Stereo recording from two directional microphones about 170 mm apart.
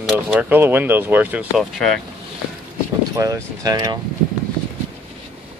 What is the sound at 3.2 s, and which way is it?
Speech, 20° right (ahead or behind).